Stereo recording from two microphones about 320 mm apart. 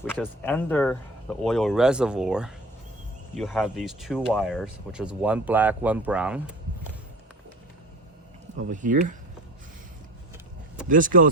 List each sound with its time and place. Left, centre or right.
0.0 s speech: centre
8.5 s speech: right
10.8 s speech: right